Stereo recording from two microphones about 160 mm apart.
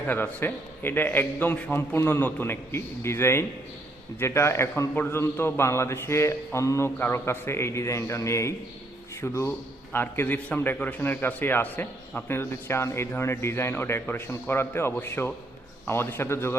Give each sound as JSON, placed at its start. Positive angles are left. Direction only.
{"t": 0.0, "sound": "a man's voice", "side_deg": 10}